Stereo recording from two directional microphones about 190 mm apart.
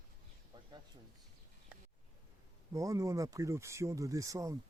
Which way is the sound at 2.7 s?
15° right (ahead or behind).